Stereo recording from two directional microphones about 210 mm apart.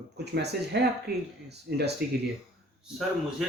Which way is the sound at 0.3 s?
50° right (ahead or behind).